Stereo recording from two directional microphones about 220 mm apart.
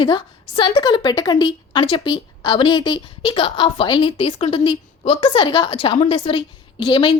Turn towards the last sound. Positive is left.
turn(degrees=20)  # may be behind; listen again after turning